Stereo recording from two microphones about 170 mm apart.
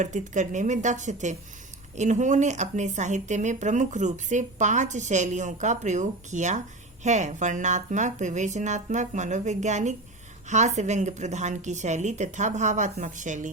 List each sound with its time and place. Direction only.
0.0 s speech: 45° right (ahead or behind)